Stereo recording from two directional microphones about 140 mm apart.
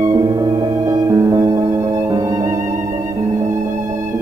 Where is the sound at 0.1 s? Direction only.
25° right (ahead or behind).